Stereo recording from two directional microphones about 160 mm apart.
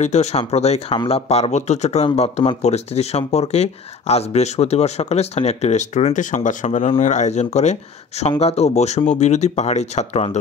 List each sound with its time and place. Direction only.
0.0 s speech: 45° left (ahead or behind)